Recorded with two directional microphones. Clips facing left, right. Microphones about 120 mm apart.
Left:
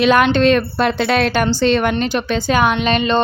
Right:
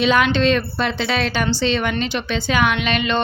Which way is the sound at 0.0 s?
50° left (ahead or behind).